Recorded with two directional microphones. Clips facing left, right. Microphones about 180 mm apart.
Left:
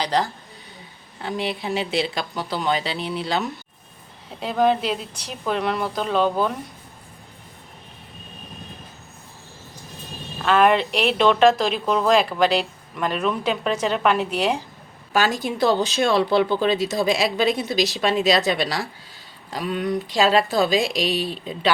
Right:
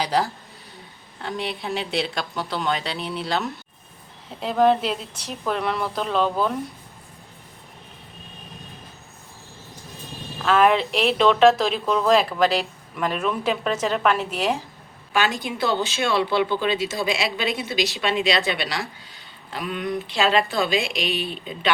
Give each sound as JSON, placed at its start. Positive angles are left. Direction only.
{"t": 0.0, "sound": "a woman's voice", "side_deg": -5}
{"t": 10.3, "sound": "a woman's voice", "side_deg": 0}
{"t": 15.4, "sound": "speech", "side_deg": 40}